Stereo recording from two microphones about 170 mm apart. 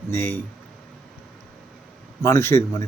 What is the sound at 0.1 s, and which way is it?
Speech, 15° left (ahead or behind).